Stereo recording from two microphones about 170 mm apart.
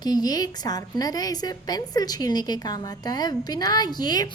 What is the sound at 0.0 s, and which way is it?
A woman's voice, 25° left (ahead or behind).